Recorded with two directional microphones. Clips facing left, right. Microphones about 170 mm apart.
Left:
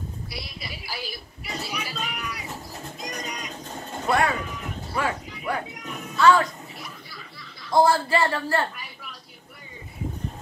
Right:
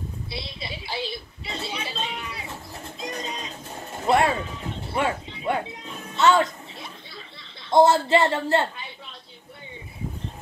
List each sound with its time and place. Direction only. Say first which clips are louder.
0.3 s a woman's voice: right 3 dB; 25° right (ahead or behind)
3.0 s music: right 3 dB; 25° right (ahead or behind)
4.0 s a sound: right 3 dB; 25° right (ahead or behind)
7.7 s a woman's voice: right 3 dB; 25° right (ahead or behind)